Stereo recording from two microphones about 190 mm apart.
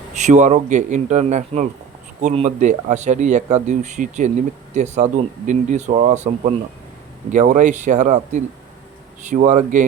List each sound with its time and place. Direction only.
0.1 s speech: 40° right (ahead or behind)